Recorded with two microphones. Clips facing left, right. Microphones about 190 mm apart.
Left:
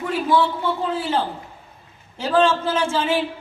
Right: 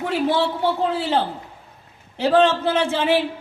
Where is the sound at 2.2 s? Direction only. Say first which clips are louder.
Right 2 dB; 60° right (ahead or behind).